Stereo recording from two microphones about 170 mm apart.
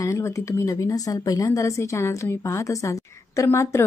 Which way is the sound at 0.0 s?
15° left (ahead or behind).